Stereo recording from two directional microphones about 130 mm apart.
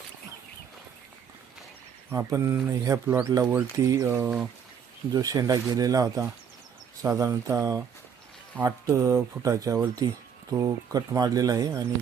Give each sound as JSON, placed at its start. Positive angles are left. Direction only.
{"t": 2.0, "sound": "speech", "side_deg": -25}